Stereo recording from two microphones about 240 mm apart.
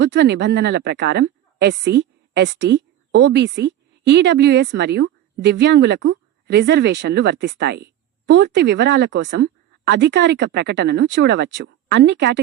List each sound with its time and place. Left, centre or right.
0.0 s a woman's voice: right